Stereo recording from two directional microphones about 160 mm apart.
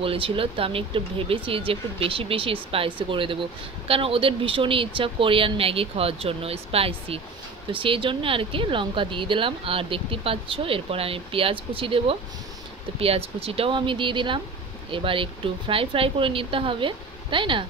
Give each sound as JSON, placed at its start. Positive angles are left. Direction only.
{"t": 0.0, "sound": "speech", "side_deg": -35}